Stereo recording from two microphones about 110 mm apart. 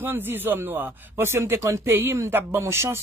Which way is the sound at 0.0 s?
20° right (ahead or behind).